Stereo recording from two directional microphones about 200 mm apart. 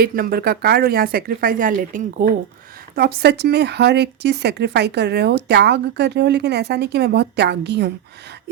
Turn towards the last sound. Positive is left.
turn(degrees=-55)  # may be behind; listen again after turning